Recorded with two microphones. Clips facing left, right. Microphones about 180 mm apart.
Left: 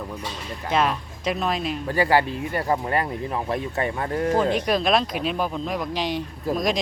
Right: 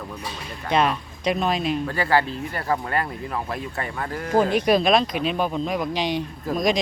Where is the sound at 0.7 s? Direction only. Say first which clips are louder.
Right 1 dB; 5° left (ahead or behind).